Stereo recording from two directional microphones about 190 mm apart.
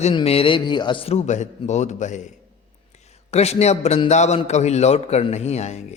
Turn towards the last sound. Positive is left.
turn(degrees=35)  # may be behind; listen again after turning